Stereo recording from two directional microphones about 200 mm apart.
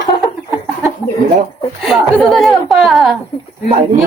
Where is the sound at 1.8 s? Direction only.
Centre (ahead or behind).